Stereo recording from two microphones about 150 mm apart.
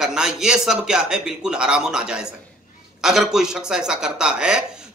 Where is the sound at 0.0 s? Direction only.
5° right (ahead or behind).